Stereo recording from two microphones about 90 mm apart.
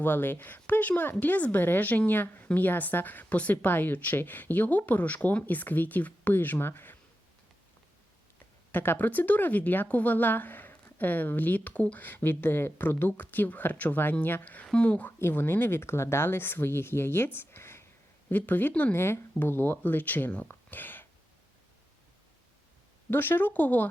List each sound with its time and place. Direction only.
0.0 s speech: 20° left (ahead or behind)
8.7 s speech: 20° left (ahead or behind)
20.5 s a sound: 20° left (ahead or behind)
23.0 s speech: 25° left (ahead or behind)